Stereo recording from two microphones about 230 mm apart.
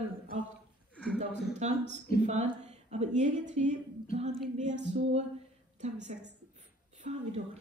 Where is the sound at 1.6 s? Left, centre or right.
Right.